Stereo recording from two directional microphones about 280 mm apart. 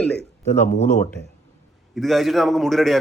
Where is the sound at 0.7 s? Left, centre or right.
Left.